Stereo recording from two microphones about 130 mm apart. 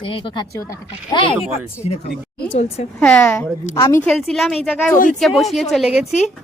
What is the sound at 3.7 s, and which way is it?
Speech, 25° left (ahead or behind).